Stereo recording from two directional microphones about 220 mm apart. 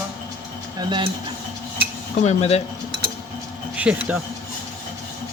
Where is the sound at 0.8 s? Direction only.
20° right (ahead or behind).